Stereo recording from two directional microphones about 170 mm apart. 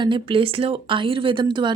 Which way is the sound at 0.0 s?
30° right (ahead or behind).